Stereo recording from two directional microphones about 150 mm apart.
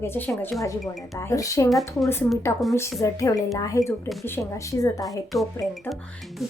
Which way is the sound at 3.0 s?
20° left (ahead or behind).